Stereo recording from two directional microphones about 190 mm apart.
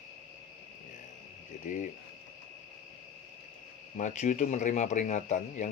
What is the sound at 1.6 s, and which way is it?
Speech, 40° left (ahead or behind).